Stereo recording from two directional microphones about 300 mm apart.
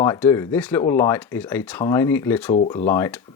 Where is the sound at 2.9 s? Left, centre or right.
Centre.